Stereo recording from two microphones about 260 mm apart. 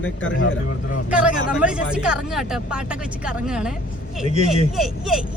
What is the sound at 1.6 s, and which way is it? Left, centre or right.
Speech, centre.